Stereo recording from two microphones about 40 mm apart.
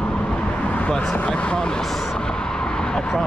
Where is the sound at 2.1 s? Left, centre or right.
Centre.